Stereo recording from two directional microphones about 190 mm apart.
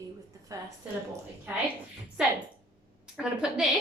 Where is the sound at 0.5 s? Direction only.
15° right (ahead or behind).